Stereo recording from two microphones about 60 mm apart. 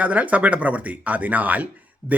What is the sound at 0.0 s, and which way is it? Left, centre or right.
Speech, right.